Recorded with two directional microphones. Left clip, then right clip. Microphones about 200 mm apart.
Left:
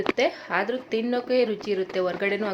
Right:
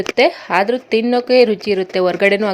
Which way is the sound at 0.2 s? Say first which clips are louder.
Right 15 dB; 40° right (ahead or behind).